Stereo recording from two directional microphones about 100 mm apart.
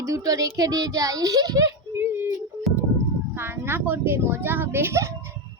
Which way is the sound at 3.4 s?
25° right (ahead or behind).